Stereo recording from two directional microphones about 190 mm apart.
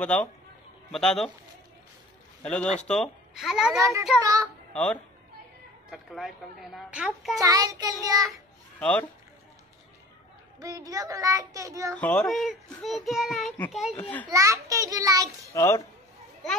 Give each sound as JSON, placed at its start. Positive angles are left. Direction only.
{"t": 0.0, "sound": "a child's voice", "side_deg": 5}
{"t": 2.4, "sound": "a child's voice", "side_deg": 5}
{"t": 3.7, "sound": "child singing", "side_deg": -15}
{"t": 5.9, "sound": "a child's voice", "side_deg": 0}
{"t": 7.3, "sound": "child singing", "side_deg": -20}
{"t": 8.7, "sound": "speech", "side_deg": 5}
{"t": 10.6, "sound": "child singing", "side_deg": -20}
{"t": 11.9, "sound": "a child's voice", "side_deg": 5}
{"t": 14.2, "sound": "child singing", "side_deg": -15}
{"t": 15.5, "sound": "a child's voice", "side_deg": 15}